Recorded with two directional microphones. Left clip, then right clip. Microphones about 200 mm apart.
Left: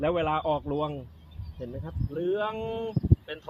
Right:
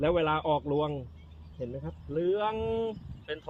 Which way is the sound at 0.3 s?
25° right (ahead or behind).